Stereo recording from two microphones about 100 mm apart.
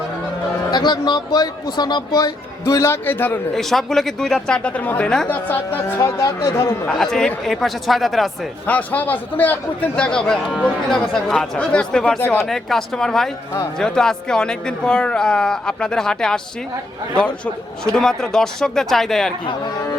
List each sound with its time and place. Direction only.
0.7 s speech: 45° left (ahead or behind); by 3.3 s 20° left (ahead or behind)
3.5 s speech: centre (ahead or behind)
5.3 s speech: 20° left (ahead or behind)
6.0 s speech: 30° left (ahead or behind)
6.8 s speech: 5° left (ahead or behind)
8.6 s speech: 15° left (ahead or behind)
12.2 s speech: 20° left (ahead or behind)
12.5 s speech: centre (ahead or behind)